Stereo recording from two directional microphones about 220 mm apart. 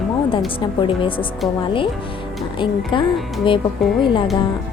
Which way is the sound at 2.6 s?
20° left (ahead or behind).